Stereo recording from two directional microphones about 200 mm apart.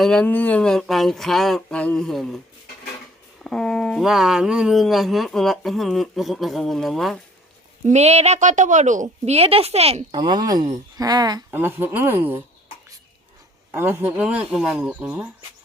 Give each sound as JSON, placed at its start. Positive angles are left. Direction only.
{"t": 0.0, "sound": "speech", "side_deg": 5}
{"t": 3.4, "sound": "speech", "side_deg": 5}
{"t": 7.9, "sound": "a woman's voice", "side_deg": -35}
{"t": 13.7, "sound": "speech", "side_deg": -10}